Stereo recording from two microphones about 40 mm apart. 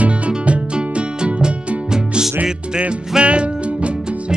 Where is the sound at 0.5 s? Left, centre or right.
Right.